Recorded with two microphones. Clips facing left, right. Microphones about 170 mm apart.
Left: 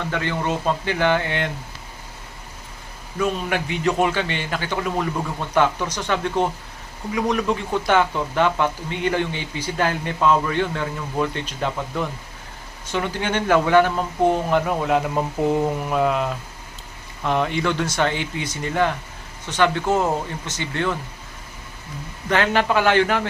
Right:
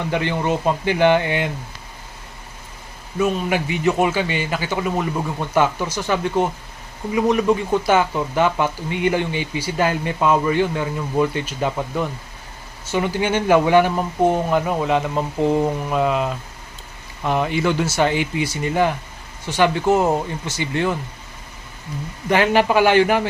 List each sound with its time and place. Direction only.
0.1 s speech: 15° right (ahead or behind)
3.2 s speech: 5° right (ahead or behind)
22.3 s speech: 10° right (ahead or behind)